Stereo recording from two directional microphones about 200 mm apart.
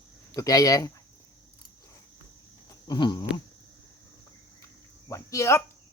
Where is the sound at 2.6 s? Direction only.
20° left (ahead or behind).